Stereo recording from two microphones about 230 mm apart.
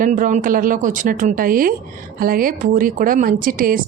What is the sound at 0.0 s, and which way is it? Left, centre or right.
Speech, right.